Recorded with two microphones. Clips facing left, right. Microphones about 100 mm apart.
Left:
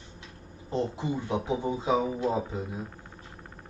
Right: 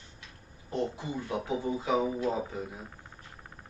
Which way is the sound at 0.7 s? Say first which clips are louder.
Left 3 dB; 25° left (ahead or behind).